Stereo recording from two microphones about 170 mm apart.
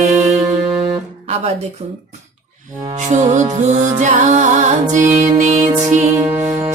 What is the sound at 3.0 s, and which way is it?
Music, 45° right (ahead or behind).